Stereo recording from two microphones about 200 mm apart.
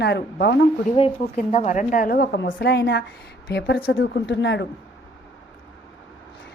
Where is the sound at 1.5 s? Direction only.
40° left (ahead or behind); by 4.6 s 60° left (ahead or behind).